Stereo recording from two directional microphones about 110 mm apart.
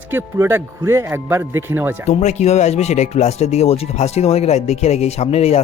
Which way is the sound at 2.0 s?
85° left.